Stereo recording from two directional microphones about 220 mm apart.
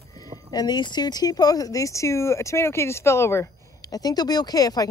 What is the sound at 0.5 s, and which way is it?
Speech, 20° left (ahead or behind).